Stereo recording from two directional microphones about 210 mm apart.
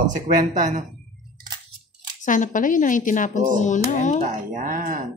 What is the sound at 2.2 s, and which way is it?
Speech, 40° left (ahead or behind).